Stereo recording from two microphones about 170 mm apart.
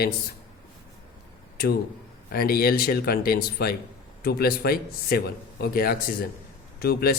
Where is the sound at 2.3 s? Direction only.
60° left (ahead or behind).